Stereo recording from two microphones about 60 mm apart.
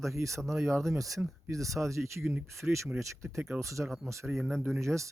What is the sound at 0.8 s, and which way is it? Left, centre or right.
Speech, right.